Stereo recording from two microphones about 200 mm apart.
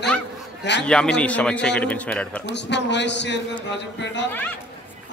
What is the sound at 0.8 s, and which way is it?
A man's voice, 5° left (ahead or behind).